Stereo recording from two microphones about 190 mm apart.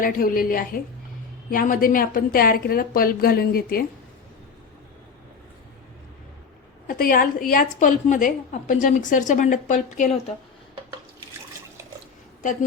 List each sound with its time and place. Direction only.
0.0 s a woman's voice: 50° left (ahead or behind)
6.8 s a woman's voice: 50° left (ahead or behind)